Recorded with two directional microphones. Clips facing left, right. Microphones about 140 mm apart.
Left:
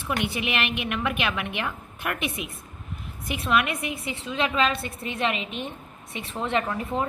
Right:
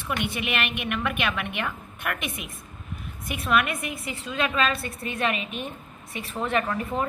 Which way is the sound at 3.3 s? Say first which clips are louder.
Even; 25° left (ahead or behind).